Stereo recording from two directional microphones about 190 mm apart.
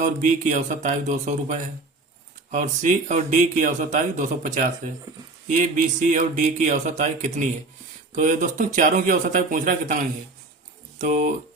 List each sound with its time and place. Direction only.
0.0 s speech: 40° right (ahead or behind)